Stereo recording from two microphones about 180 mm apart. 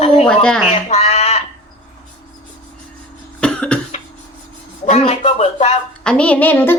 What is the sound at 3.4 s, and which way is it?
Cough, 5° left (ahead or behind).